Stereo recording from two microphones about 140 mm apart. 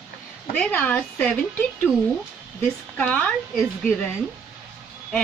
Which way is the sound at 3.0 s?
10° left (ahead or behind).